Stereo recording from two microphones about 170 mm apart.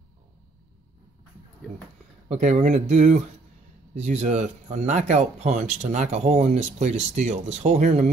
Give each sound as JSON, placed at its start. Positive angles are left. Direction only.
{"t": 2.2, "sound": "speech", "side_deg": -40}